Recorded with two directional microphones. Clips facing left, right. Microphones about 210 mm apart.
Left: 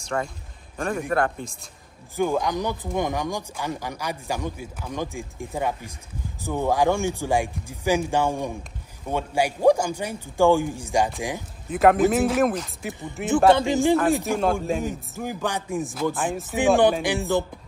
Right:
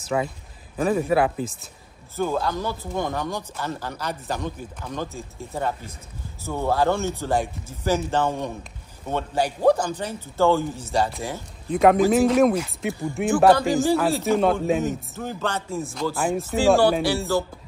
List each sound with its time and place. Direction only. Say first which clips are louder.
0.0 s a man's voice: right 3 dB; 5° right (ahead or behind)
2.1 s speech: left 1 dB; 15° left (ahead or behind)
11.8 s a man's voice: right 1 dB; centre (ahead or behind)
13.5 s speech: even; 25° left (ahead or behind)
14.4 s a man's voice: right 3 dB; centre (ahead or behind)
14.8 s speech: right 2 dB; 10° left (ahead or behind)
16.2 s a man's voice: right 3 dB; centre (ahead or behind)
16.5 s speech: even; 20° left (ahead or behind)